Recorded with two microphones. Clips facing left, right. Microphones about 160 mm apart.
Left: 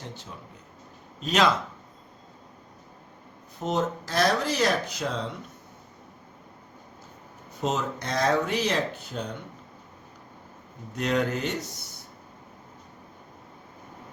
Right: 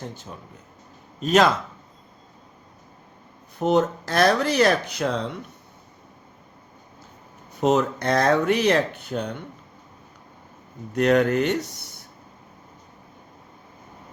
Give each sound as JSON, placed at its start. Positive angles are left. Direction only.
{"t": 1.2, "sound": "speech", "side_deg": -50}
{"t": 3.6, "sound": "speech", "side_deg": -65}
{"t": 7.6, "sound": "speech", "side_deg": -65}
{"t": 10.9, "sound": "speech", "side_deg": -60}